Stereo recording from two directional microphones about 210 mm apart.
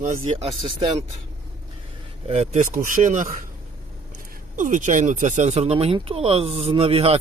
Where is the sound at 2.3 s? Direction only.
30° right (ahead or behind).